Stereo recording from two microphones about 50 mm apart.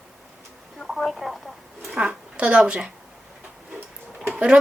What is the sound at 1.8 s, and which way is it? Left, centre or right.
Speech, centre.